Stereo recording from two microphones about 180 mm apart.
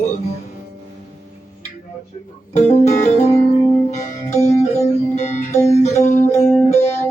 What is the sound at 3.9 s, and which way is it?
Music, 40° left (ahead or behind).